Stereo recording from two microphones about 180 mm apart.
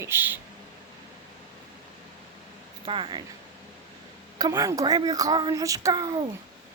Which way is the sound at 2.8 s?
30° right (ahead or behind).